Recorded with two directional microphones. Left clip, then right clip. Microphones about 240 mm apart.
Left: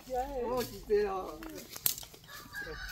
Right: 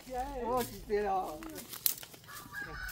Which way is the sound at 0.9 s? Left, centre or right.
Centre.